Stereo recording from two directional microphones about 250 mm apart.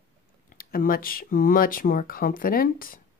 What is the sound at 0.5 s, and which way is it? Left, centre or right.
Speech, left.